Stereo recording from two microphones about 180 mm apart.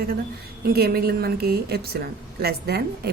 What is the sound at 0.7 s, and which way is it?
A woman's voice, 60° right (ahead or behind).